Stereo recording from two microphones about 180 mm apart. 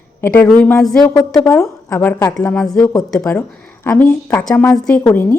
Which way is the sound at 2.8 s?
20° left (ahead or behind).